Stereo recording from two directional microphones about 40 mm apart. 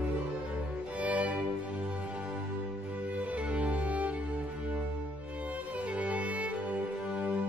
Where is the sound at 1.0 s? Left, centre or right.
Right.